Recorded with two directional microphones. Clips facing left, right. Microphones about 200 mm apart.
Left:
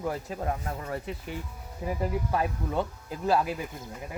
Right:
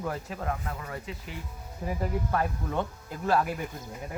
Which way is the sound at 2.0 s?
15° left (ahead or behind).